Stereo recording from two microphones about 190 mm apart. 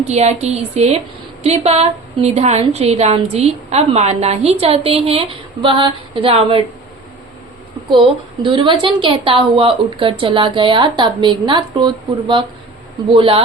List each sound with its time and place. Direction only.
0.1 s a woman's voice: 35° right (ahead or behind)
8.4 s a woman's voice: 25° right (ahead or behind)